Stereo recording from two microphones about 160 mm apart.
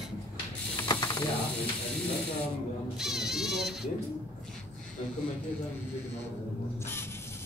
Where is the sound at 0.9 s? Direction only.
25° left (ahead or behind).